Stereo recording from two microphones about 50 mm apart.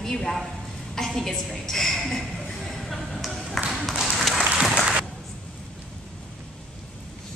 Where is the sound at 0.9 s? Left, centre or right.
Centre.